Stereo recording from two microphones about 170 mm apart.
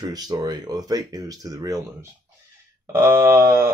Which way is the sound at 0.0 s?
20° right (ahead or behind).